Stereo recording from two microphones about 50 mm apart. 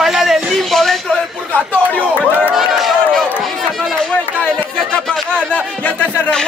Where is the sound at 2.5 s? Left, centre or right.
Centre.